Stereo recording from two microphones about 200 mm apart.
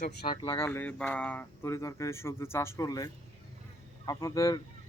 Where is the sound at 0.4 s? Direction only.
15° left (ahead or behind).